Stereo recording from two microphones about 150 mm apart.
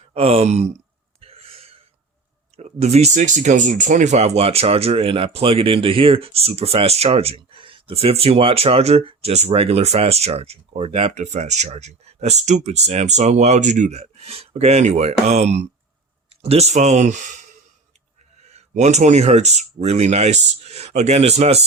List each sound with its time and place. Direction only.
0.1 s speech: 40° right (ahead or behind)
1.2 s a sound: 40° right (ahead or behind)
2.6 s speech: 45° right (ahead or behind)
18.4 s speech: 50° right (ahead or behind)